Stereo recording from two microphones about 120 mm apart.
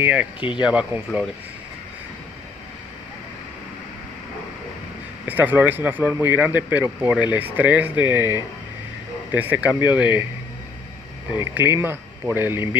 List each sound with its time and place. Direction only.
0.0 s speech: 10° right (ahead or behind)
5.2 s speech: 15° right (ahead or behind)
11.3 s speech: 20° right (ahead or behind)